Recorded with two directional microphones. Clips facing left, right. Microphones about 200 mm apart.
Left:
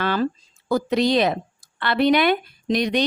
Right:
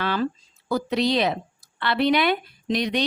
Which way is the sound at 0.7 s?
45° left (ahead or behind).